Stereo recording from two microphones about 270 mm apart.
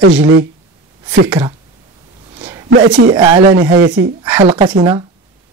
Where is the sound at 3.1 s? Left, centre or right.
Centre.